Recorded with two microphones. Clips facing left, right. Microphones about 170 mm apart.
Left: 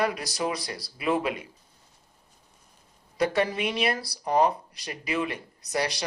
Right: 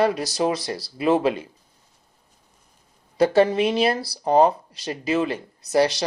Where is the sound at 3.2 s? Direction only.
30° right (ahead or behind).